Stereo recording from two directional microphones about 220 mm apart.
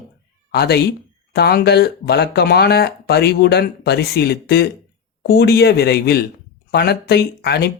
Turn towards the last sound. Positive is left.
turn(degrees=50)  # may be behind; listen again after turning